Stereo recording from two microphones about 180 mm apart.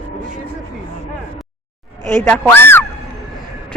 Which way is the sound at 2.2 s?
10° left (ahead or behind).